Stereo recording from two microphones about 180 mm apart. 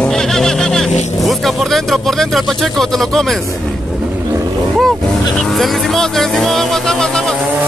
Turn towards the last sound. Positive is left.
turn(degrees=5)  # may be behind; listen again after turning